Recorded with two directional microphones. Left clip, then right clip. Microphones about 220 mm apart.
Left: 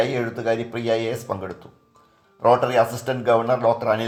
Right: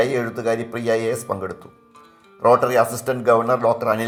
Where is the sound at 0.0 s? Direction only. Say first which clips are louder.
Right 2 dB; 25° right (ahead or behind).